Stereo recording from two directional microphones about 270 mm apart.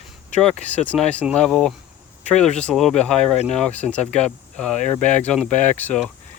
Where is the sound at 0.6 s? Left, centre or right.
Centre.